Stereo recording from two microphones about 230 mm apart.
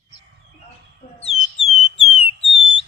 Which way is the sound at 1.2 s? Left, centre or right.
Left.